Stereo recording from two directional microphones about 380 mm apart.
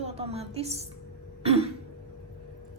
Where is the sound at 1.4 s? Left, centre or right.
Centre.